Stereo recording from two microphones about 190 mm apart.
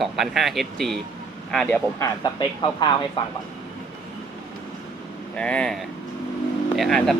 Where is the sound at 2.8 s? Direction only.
25° left (ahead or behind).